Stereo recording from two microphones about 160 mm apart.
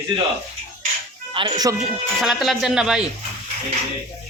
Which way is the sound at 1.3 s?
25° right (ahead or behind).